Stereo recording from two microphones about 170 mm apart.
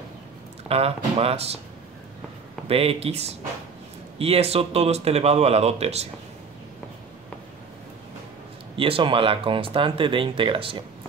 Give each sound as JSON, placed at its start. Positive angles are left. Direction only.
{"t": 0.7, "sound": "speech", "side_deg": -35}
{"t": 2.7, "sound": "speech", "side_deg": -35}
{"t": 8.7, "sound": "speech", "side_deg": -30}